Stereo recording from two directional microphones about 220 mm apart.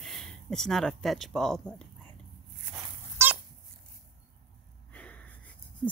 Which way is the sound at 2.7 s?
5° right (ahead or behind).